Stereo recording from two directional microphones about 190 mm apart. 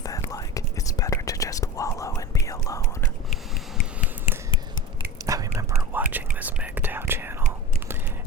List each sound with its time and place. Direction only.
0.0 s whispering: 20° left (ahead or behind)
5.2 s whispering: 20° right (ahead or behind)